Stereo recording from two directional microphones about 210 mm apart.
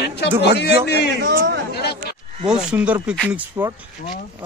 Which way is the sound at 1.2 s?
55° right (ahead or behind).